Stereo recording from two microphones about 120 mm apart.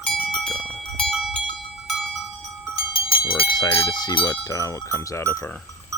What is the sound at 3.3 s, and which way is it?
Speech, 40° left (ahead or behind).